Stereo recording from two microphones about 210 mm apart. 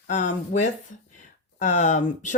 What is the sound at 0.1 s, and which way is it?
Speech, 35° left (ahead or behind).